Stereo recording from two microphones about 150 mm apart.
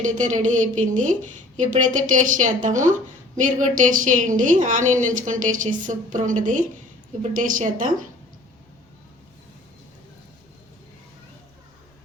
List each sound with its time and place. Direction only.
0.0 s speech: 55° right (ahead or behind)